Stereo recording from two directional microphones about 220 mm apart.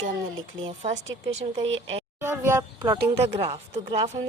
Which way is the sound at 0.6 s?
30° right (ahead or behind).